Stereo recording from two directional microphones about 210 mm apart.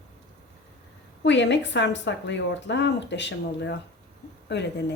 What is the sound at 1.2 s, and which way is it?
Speech, 55° left (ahead or behind).